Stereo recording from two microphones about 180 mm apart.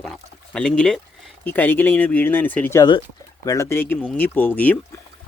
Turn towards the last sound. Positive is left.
turn(degrees=10)  # may be behind; listen again after turning